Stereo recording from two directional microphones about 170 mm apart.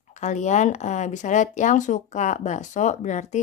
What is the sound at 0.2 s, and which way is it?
Speech, 45° left (ahead or behind).